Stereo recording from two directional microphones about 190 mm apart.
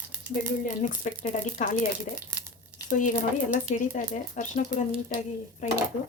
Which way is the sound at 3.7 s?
40° left (ahead or behind).